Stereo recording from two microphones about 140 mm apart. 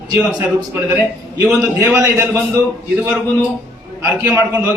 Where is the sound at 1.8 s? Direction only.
20° right (ahead or behind).